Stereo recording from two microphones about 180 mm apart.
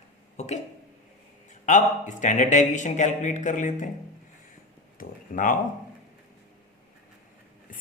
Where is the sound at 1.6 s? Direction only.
45° left (ahead or behind).